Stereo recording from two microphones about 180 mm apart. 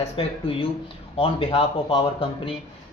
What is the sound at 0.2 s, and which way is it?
Speech, 30° left (ahead or behind).